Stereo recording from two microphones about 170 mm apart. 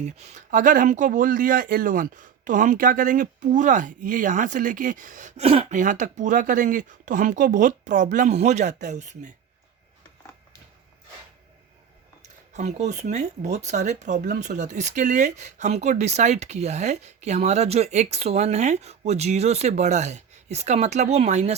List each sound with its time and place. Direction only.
0.0 s speech: 45° right (ahead or behind)
5.5 s speech: 35° right (ahead or behind)
5.8 s speech: 50° right (ahead or behind)
12.5 s speech: 45° right (ahead or behind)